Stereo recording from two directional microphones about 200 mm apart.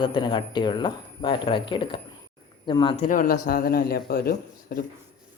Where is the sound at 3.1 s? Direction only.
45° left (ahead or behind).